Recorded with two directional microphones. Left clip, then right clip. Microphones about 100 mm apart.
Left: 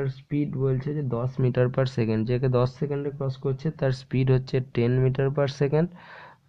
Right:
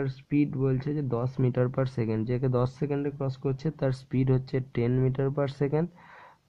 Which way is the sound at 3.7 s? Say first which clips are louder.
Left 2 dB; 25° right (ahead or behind).